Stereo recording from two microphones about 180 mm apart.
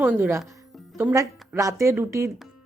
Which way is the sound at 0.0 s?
10° right (ahead or behind).